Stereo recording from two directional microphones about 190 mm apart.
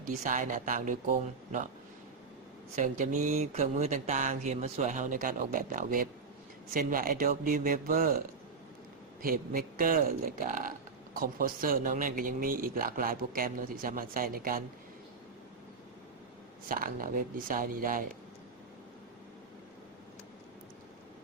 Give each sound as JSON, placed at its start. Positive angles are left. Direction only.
{"t": 0.0, "sound": "speech", "side_deg": -45}
{"t": 2.7, "sound": "speech", "side_deg": -40}
{"t": 9.2, "sound": "speech", "side_deg": -50}
{"t": 16.6, "sound": "speech", "side_deg": -45}